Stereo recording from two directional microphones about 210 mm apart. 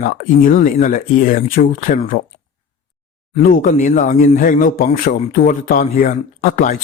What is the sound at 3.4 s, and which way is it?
Speech, 40° left (ahead or behind).